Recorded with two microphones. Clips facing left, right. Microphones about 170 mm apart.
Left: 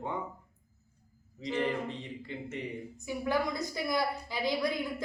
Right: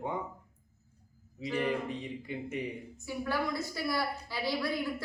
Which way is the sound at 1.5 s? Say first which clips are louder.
Even; 15° right (ahead or behind).